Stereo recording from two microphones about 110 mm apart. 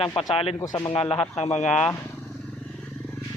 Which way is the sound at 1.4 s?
85° left.